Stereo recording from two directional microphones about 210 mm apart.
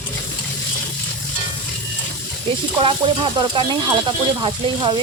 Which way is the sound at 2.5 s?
25° right (ahead or behind).